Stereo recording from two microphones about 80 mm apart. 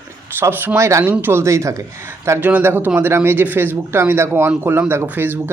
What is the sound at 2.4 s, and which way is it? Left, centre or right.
Speech, right.